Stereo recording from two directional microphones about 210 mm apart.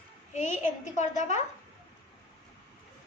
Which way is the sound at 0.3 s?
35° left (ahead or behind).